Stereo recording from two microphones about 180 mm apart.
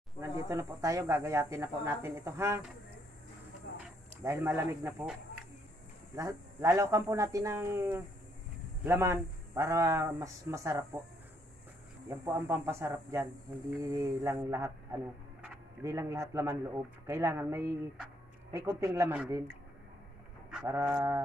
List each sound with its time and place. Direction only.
0.2 s speech: 15° right (ahead or behind)
3.7 s a sound: 65° left (ahead or behind)
4.2 s speech: 15° right (ahead or behind)
6.1 s speech: 15° right (ahead or behind)
12.1 s speech: 15° right (ahead or behind)
20.6 s speech: 15° right (ahead or behind)